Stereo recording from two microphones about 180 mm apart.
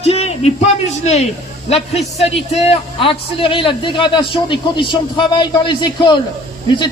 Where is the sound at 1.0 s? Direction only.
40° left (ahead or behind).